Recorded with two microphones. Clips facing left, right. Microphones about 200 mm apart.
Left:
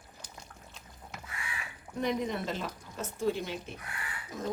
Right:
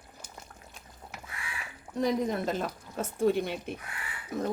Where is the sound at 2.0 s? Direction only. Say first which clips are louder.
Right 4 dB; 45° right (ahead or behind).